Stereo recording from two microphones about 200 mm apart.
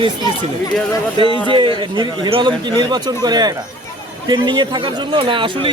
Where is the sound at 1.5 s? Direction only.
25° right (ahead or behind).